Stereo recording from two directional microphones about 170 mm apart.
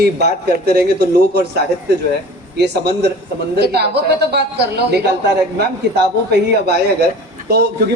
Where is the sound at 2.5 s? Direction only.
80° right.